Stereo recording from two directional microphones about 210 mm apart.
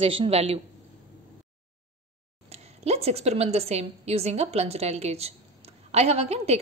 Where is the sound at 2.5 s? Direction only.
30° right (ahead or behind).